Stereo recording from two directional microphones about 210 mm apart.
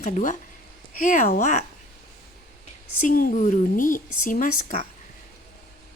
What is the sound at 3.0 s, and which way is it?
Speech, 40° left (ahead or behind).